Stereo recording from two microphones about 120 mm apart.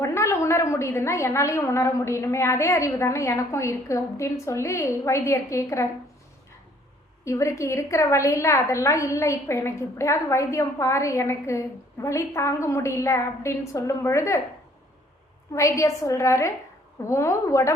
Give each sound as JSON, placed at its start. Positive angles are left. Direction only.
{"t": 0.0, "sound": "a woman's voice", "side_deg": 25}
{"t": 7.3, "sound": "a woman's voice", "side_deg": 25}
{"t": 15.5, "sound": "a woman's voice", "side_deg": 25}